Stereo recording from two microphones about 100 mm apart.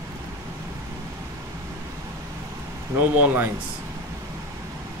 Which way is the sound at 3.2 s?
20° right (ahead or behind).